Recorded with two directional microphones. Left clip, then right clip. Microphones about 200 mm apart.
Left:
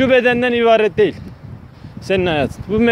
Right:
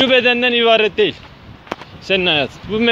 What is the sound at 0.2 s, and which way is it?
Speech, 30° left (ahead or behind).